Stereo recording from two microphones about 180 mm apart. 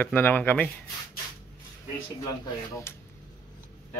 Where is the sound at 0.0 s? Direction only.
10° left (ahead or behind).